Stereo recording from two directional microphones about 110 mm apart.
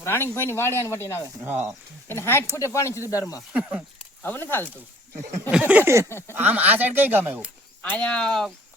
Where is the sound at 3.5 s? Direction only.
10° right (ahead or behind).